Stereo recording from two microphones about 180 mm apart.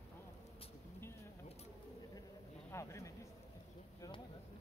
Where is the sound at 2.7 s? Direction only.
15° left (ahead or behind).